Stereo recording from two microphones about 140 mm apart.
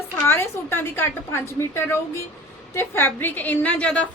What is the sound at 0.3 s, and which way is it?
A woman's voice, 15° left (ahead or behind).